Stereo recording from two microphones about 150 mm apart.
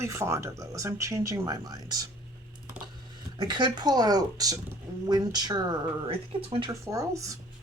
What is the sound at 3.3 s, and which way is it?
Speech, 30° right (ahead or behind).